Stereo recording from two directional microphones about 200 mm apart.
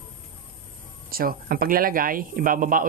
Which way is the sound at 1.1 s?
45° right (ahead or behind).